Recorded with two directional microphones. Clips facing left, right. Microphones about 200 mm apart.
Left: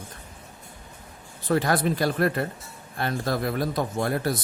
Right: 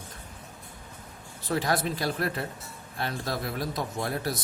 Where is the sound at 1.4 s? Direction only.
55° left (ahead or behind).